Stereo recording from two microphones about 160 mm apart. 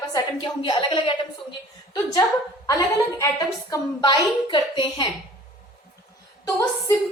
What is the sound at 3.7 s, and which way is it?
A woman's voice, 30° left (ahead or behind).